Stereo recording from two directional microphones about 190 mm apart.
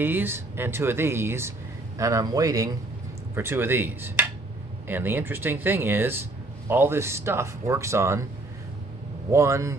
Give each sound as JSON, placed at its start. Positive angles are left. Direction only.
{"t": 0.0, "sound": "speech", "side_deg": -10}
{"t": 9.3, "sound": "speech", "side_deg": -15}